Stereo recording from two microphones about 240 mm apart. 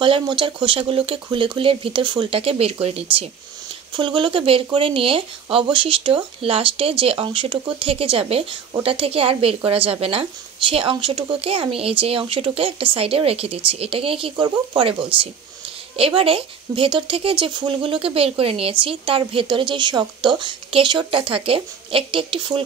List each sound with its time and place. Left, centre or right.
0.0 s speech: centre